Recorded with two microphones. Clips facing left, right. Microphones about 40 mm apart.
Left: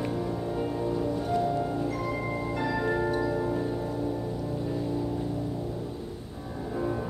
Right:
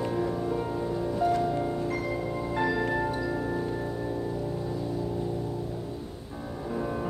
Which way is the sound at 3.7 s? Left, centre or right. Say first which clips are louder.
Left 1 dB; centre.